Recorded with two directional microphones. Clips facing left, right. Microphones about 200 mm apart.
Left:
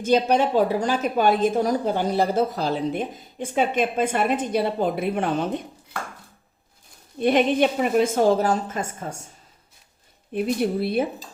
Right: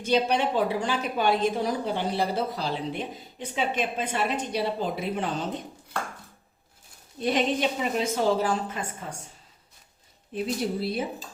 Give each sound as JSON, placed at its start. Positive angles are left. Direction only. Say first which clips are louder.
{"t": 0.0, "sound": "a woman's voice", "louder": "left 5 dB", "side_deg": 45}
{"t": 7.2, "sound": "a woman's voice", "louder": "left 6 dB", "side_deg": 55}
{"t": 10.3, "sound": "speech", "louder": "left 5 dB", "side_deg": 60}